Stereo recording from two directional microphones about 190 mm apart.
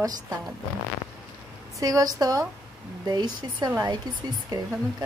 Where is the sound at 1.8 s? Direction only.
20° right (ahead or behind).